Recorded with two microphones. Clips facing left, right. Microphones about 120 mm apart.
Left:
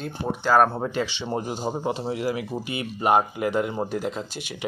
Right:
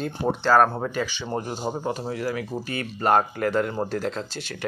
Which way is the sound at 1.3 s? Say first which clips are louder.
Even; 10° left (ahead or behind).